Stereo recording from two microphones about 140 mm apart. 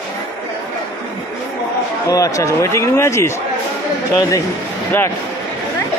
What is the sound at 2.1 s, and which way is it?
Speech, 25° left (ahead or behind).